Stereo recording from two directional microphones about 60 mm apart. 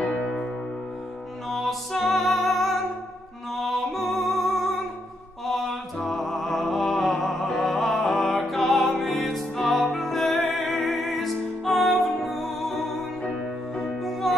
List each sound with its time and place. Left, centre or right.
0.0 s music: centre
1.5 s music: centre
13.7 s music: centre